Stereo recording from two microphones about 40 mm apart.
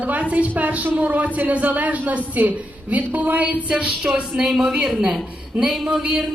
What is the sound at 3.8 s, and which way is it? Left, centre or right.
Speech, right.